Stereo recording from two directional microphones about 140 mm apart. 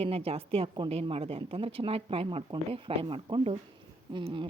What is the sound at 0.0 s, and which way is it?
A woman's voice, 45° right (ahead or behind).